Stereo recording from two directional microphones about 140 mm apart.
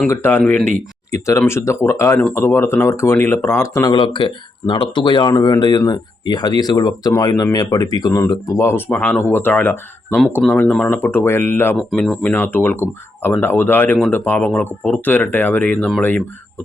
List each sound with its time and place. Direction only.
0.1 s speech: 15° left (ahead or behind)
1.1 s speech: 20° left (ahead or behind)
3.9 s speech: 35° left (ahead or behind); by 11.8 s 15° left (ahead or behind)
11.8 s speech: centre (ahead or behind)
12.3 s speech: 15° left (ahead or behind)